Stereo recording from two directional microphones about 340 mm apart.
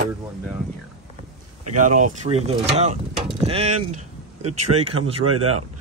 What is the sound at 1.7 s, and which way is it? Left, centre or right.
Speech, right.